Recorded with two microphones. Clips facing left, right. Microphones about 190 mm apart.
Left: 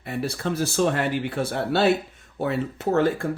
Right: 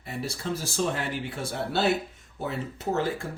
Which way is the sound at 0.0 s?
60° left (ahead or behind).